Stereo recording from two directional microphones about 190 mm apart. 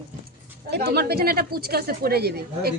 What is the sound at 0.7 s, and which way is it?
A woman's voice, 60° right (ahead or behind).